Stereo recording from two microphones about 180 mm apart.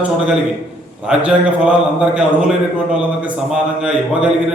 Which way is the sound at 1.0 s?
5° right (ahead or behind).